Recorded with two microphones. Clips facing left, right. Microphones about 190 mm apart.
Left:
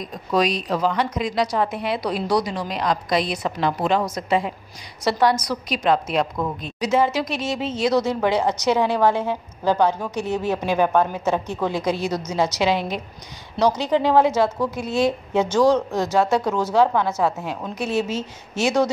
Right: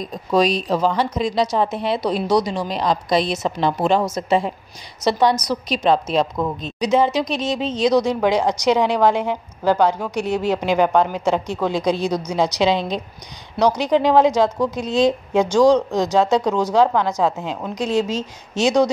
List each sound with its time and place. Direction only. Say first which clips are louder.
0.3 s speech: right 3 dB; 30° right (ahead or behind)
6.3 s speech: right 3 dB; 15° right (ahead or behind)